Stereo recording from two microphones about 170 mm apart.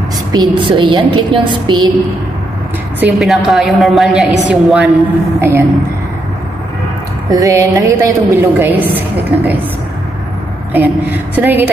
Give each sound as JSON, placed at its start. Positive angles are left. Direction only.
{"t": 0.3, "sound": "a woman's voice", "side_deg": -25}
{"t": 3.0, "sound": "a woman's voice", "side_deg": -5}
{"t": 5.4, "sound": "a woman's voice", "side_deg": -15}
{"t": 7.2, "sound": "a woman's voice", "side_deg": -20}
{"t": 10.7, "sound": "a woman's voice", "side_deg": -10}